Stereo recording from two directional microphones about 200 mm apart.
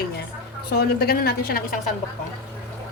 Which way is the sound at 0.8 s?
50° left (ahead or behind).